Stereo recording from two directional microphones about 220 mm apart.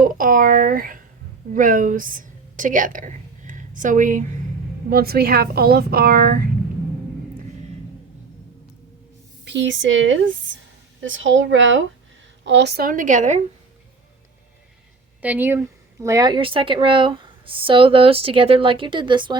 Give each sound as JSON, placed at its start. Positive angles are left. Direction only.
{"t": 0.0, "sound": "a woman's voice", "side_deg": -40}
{"t": 9.4, "sound": "a woman's voice", "side_deg": -55}
{"t": 15.2, "sound": "speech", "side_deg": -10}